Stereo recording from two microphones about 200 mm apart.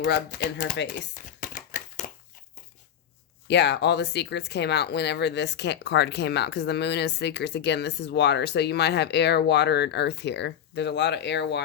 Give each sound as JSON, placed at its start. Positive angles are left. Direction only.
{"t": 0.0, "sound": "speech", "side_deg": 50}
{"t": 1.1, "sound": "a sound", "side_deg": 40}
{"t": 3.4, "sound": "speech", "side_deg": 60}